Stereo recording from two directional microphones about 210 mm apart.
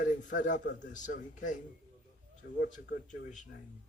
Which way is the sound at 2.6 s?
35° left (ahead or behind).